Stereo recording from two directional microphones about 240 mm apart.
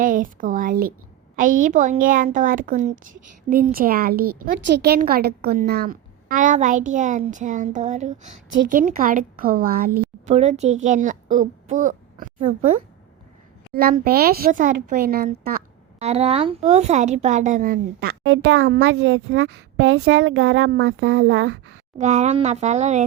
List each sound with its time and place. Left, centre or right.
0.0 s speech: right
10.3 s speech: right
21.9 s speech: right